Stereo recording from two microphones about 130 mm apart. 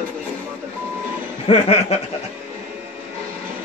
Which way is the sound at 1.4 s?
50° left (ahead or behind).